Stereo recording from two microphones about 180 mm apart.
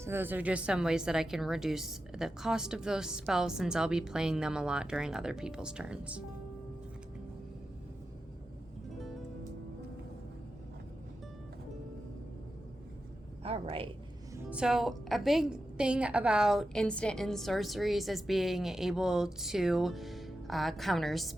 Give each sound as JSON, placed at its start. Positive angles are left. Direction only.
{"t": 0.0, "sound": "a woman's voice", "side_deg": -10}
{"t": 13.4, "sound": "speech", "side_deg": -35}
{"t": 14.3, "sound": "a woman's voice", "side_deg": -5}